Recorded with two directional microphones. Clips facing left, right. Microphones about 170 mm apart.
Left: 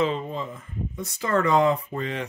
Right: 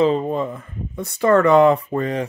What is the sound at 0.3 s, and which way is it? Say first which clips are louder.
Speech: right 9 dB; 60° right (ahead or behind).